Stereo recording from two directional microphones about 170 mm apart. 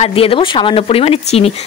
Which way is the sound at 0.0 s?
35° left (ahead or behind).